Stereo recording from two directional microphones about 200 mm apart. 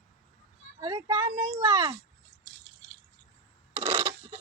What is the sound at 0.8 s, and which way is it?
Speech, 25° right (ahead or behind).